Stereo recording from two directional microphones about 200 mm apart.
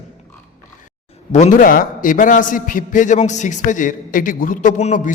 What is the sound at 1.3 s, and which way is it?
A man's voice, 35° left (ahead or behind).